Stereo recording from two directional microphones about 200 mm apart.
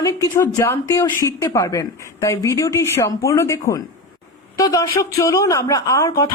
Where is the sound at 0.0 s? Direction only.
15° left (ahead or behind).